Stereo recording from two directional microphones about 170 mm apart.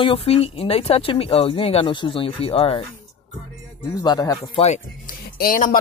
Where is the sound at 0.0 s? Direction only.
35° left (ahead or behind).